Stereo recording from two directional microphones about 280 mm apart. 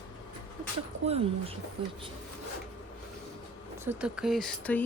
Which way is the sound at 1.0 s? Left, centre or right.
Right.